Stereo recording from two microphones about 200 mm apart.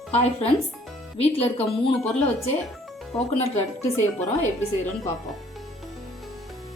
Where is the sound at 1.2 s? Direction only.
30° left (ahead or behind).